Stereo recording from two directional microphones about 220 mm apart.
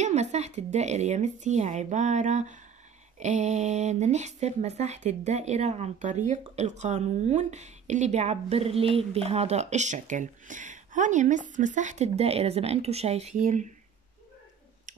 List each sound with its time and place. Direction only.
0.0 s speech: 30° right (ahead or behind)